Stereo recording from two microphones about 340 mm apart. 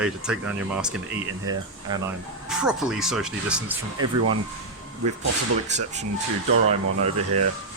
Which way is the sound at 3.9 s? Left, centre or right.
Right.